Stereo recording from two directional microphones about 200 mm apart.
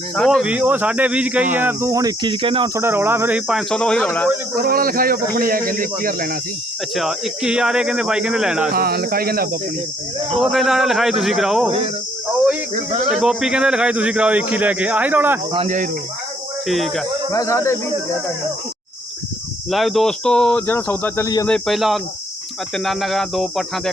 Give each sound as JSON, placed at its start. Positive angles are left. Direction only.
{"t": 0.2, "sound": "a man's voice", "side_deg": 0}
{"t": 2.7, "sound": "speech", "side_deg": -10}
{"t": 4.5, "sound": "speech", "side_deg": -45}
{"t": 6.9, "sound": "speech", "side_deg": 0}
{"t": 8.7, "sound": "speech", "side_deg": -50}
{"t": 10.4, "sound": "speech", "side_deg": 0}
{"t": 13.1, "sound": "a man's voice", "side_deg": -5}
{"t": 15.5, "sound": "speech", "side_deg": -35}
{"t": 16.6, "sound": "speech", "side_deg": 0}
{"t": 17.3, "sound": "speech", "side_deg": 15}
{"t": 19.7, "sound": "speech", "side_deg": 0}
{"t": 21.4, "sound": "speech", "side_deg": 0}